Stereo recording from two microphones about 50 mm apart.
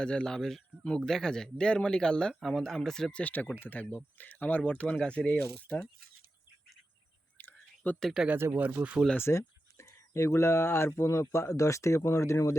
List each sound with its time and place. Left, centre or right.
0.0 s speech: centre
3.4 s speech: left
7.3 s whispering: left
8.2 s speech: centre
8.5 s speech: right
9.1 s speech: left
9.7 s speech: left